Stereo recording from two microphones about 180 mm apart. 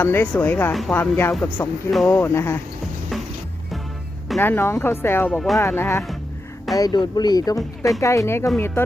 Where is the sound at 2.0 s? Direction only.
15° left (ahead or behind).